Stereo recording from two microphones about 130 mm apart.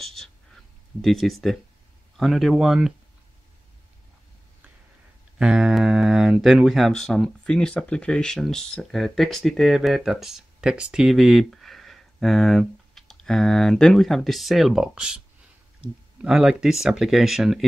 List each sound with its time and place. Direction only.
0.0 s a sound: 5° left (ahead or behind)
1.0 s speech: centre (ahead or behind)
5.4 s speech: 5° right (ahead or behind)